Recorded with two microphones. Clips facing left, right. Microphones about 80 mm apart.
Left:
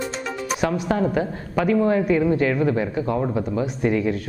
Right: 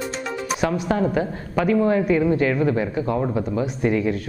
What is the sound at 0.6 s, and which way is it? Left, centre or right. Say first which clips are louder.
Speech: even; centre.